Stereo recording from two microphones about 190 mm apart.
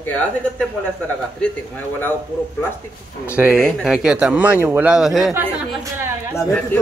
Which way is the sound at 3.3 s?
5° right (ahead or behind).